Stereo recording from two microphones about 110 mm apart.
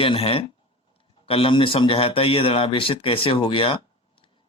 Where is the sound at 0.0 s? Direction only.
60° left (ahead or behind).